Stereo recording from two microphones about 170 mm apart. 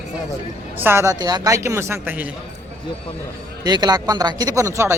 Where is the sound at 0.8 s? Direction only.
15° right (ahead or behind).